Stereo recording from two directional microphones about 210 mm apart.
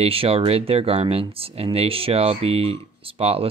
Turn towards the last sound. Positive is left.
turn(degrees=-30)  # may be behind; listen again after turning